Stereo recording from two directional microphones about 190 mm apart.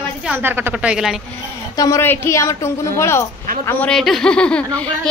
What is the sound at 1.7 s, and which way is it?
A woman's voice, 15° left (ahead or behind).